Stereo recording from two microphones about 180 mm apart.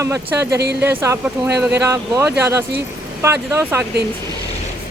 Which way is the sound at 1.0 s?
15° right (ahead or behind).